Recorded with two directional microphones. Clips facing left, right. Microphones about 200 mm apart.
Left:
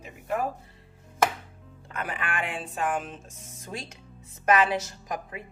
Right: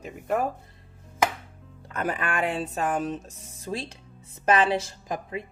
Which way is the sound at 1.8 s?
40° right (ahead or behind).